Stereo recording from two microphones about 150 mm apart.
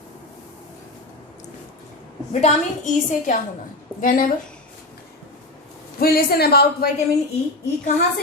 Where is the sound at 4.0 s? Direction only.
65° left (ahead or behind).